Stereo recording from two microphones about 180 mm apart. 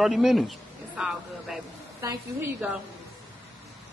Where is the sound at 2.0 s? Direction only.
20° right (ahead or behind).